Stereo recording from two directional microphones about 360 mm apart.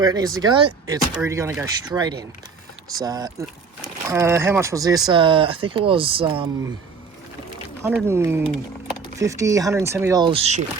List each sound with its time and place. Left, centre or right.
0.0 s speech: centre
7.8 s speech: centre